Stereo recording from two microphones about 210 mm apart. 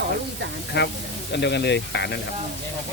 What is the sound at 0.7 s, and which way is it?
Speech, 55° left (ahead or behind).